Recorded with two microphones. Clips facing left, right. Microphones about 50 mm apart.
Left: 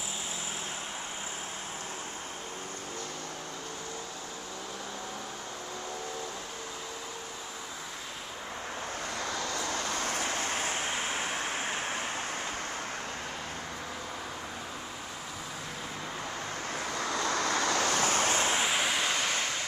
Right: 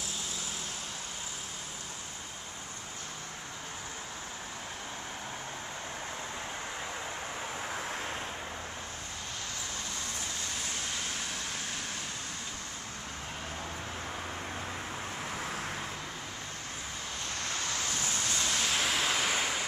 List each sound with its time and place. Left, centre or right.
9.6 s vehicle: left
17.0 s vehicle: left
17.8 s waves: left
18.5 s waves: centre